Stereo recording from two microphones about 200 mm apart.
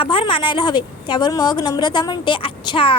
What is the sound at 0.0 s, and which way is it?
Speech, 25° left (ahead or behind).